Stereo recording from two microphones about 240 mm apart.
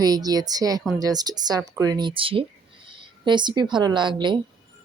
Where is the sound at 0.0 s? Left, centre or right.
Centre.